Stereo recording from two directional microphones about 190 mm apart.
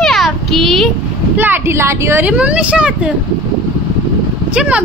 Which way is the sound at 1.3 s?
10° right (ahead or behind).